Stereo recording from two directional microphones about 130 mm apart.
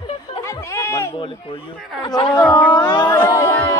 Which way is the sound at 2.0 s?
35° left (ahead or behind).